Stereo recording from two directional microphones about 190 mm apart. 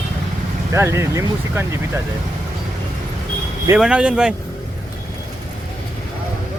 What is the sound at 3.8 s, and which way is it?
Speech, 5° right (ahead or behind).